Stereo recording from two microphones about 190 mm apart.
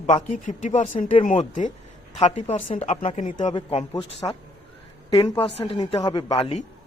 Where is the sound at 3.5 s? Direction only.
30° left (ahead or behind).